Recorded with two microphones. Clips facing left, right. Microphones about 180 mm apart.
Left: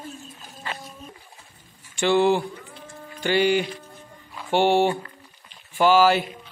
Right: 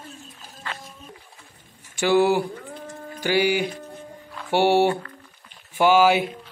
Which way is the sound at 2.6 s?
45° right (ahead or behind).